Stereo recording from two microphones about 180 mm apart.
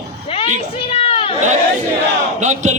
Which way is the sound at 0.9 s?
30° left (ahead or behind).